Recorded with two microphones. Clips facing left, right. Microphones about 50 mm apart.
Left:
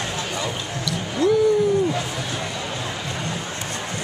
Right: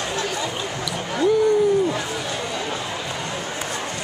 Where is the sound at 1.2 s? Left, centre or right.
Centre.